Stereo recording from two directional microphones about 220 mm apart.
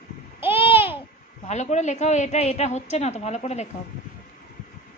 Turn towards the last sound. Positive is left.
turn(degrees=30)  # may be behind; listen again after turning